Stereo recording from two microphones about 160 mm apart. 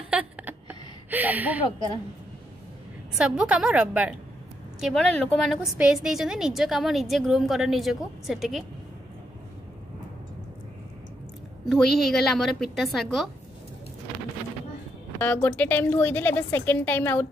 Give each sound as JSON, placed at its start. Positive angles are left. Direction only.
{"t": 0.1, "sound": "a sound", "side_deg": -10}
{"t": 3.2, "sound": "a woman's voice", "side_deg": -5}
{"t": 11.7, "sound": "a woman's voice", "side_deg": 0}
{"t": 15.2, "sound": "a woman's voice", "side_deg": 10}